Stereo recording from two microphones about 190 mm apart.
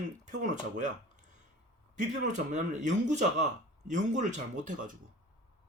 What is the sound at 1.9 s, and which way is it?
Speech, 40° right (ahead or behind).